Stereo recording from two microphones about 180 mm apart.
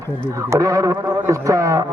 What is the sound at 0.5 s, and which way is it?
Speech, 20° right (ahead or behind).